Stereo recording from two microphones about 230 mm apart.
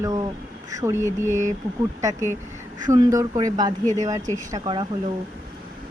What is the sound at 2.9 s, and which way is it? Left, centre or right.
Speech, centre.